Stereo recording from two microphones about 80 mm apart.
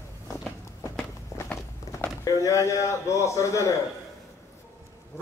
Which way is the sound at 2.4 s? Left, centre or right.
Left.